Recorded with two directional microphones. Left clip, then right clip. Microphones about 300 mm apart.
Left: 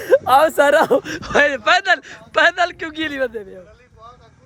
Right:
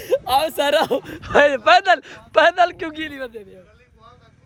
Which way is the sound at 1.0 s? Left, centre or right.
Centre.